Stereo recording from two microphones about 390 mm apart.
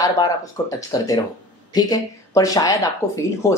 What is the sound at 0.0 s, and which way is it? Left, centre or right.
Speech, centre.